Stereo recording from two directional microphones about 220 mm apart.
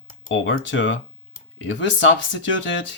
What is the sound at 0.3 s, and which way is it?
Speech, 55° left (ahead or behind).